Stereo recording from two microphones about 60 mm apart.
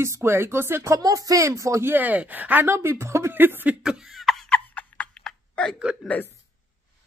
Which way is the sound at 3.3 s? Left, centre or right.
Right.